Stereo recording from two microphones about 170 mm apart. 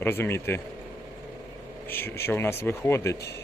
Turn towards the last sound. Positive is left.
turn(degrees=15)  # may be behind; listen again after turning